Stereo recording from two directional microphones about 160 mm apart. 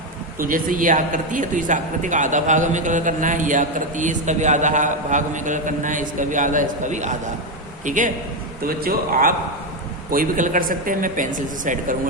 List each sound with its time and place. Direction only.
0.3 s a man's voice: 60° right (ahead or behind)
8.6 s speech: 65° right (ahead or behind)